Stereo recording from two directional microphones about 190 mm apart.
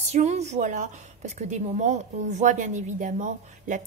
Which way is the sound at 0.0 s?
35° right (ahead or behind).